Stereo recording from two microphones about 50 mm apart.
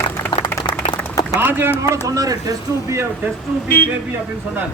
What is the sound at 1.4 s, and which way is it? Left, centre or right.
Speech, right.